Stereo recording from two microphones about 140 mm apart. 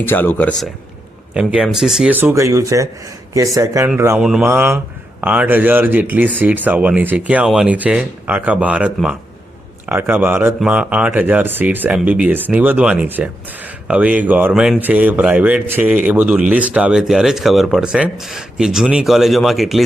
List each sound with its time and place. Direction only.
0.0 s speech: 15° left (ahead or behind)
1.3 s speech: 5° right (ahead or behind)
4.2 s speech: 5° right (ahead or behind)
4.4 s speech: 15° right (ahead or behind)